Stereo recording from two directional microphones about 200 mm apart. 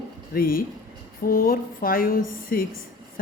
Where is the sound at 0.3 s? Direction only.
45° left (ahead or behind).